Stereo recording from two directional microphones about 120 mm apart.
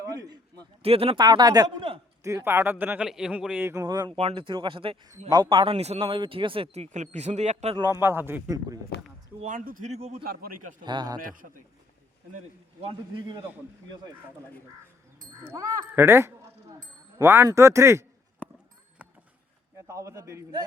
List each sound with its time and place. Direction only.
0.0 s a sound: 30° right (ahead or behind)
0.8 s speech: 55° right (ahead or behind)
1.2 s speech: 35° right (ahead or behind)
2.2 s speech: 20° right (ahead or behind)
3.7 s speech: 30° right (ahead or behind)
4.2 s speech: 50° right (ahead or behind)
6.7 s speech: 75° right (ahead or behind)
8.0 s speech: 20° right (ahead or behind)
9.4 s speech: 85° right
10.8 s speech: 35° right (ahead or behind)
12.8 s speech: 40° right (ahead or behind)
15.4 s speech: 30° right (ahead or behind)
19.9 s speech: 25° right (ahead or behind)